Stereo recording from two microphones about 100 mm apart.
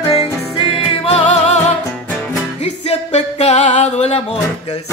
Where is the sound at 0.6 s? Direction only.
85° left.